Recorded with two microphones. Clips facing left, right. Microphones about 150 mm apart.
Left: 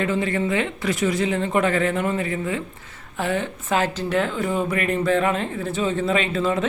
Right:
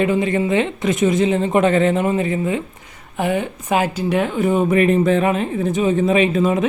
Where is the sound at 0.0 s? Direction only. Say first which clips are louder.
Right 5 dB; 15° right (ahead or behind).